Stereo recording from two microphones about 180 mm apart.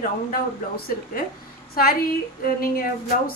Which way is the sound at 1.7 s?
55° left (ahead or behind).